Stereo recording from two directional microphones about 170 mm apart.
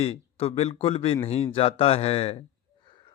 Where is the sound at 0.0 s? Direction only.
35° left (ahead or behind).